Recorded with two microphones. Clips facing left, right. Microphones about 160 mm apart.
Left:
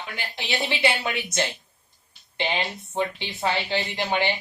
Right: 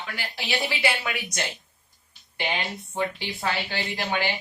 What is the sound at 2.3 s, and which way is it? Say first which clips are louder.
Speech: left 2 dB; 20° left (ahead or behind).